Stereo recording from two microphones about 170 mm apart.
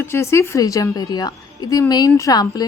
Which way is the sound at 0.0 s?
15° left (ahead or behind).